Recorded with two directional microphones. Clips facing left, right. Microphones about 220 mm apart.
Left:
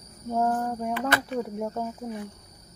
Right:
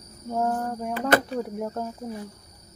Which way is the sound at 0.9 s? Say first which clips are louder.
Right 7 dB; 40° right (ahead or behind).